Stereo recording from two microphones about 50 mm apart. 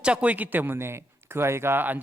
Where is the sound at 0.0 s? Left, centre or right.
Right.